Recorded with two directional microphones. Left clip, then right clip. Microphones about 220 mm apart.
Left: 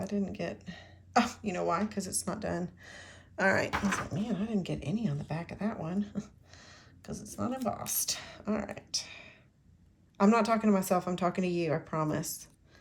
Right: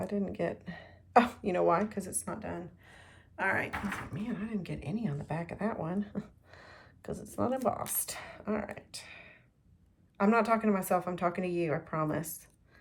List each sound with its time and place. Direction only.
0.0 s speech: centre (ahead or behind); by 2.6 s 15° left (ahead or behind)
3.3 s speech: 25° left (ahead or behind)
3.8 s a woman's voice: 5° left (ahead or behind)